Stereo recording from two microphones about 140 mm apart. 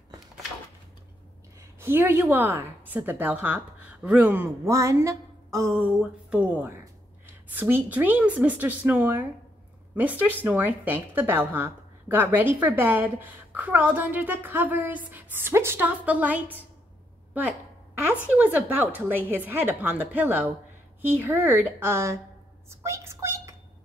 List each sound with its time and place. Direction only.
1.8 s a woman's voice: 15° right (ahead or behind)
5.8 s a woman's voice: 10° right (ahead or behind)
18.3 s speech: 10° right (ahead or behind)